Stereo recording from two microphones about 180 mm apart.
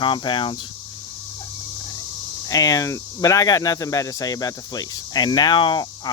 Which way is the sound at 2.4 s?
20° left (ahead or behind).